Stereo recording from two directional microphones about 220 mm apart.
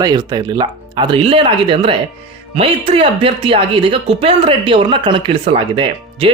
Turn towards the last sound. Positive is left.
turn(degrees=-25)  # may be behind; listen again after turning